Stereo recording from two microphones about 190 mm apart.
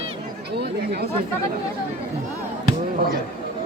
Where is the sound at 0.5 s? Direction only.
60° right (ahead or behind).